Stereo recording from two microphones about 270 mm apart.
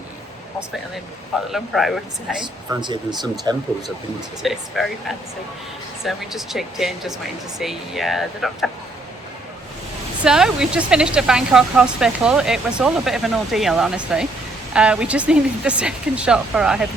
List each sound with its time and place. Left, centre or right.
1.5 s speech: centre
2.4 s speech: centre
4.4 s speech: centre
10.2 s speech: centre